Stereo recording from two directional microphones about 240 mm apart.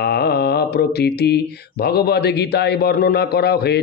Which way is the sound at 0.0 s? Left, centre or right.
Left.